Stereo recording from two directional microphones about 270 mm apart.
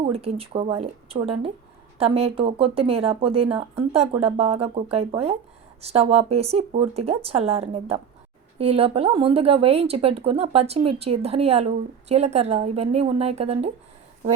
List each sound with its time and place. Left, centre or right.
0.0 s speech: right